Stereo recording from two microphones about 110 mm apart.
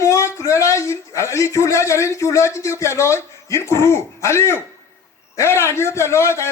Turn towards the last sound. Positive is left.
turn(degrees=25)  # may be behind; listen again after turning